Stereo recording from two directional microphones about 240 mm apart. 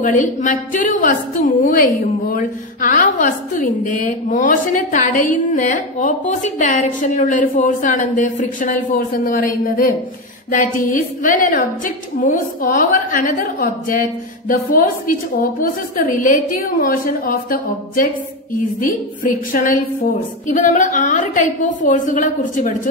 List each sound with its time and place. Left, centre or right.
0.0 s a woman's voice: left